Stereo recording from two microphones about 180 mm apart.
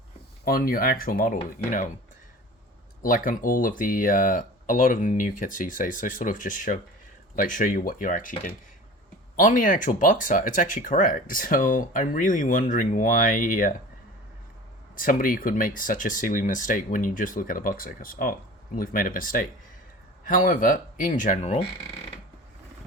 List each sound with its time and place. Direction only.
0.4 s speech: 55° left (ahead or behind)
3.0 s speech: 50° left (ahead or behind)
14.9 s speech: 50° left (ahead or behind)